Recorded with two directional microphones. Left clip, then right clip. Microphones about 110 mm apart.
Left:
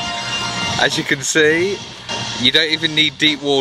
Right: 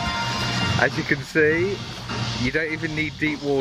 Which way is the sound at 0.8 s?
30° left (ahead or behind).